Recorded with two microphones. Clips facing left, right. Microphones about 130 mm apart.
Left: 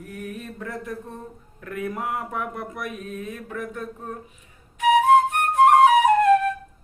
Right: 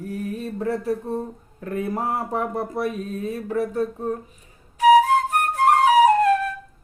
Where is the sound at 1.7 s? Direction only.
30° right (ahead or behind).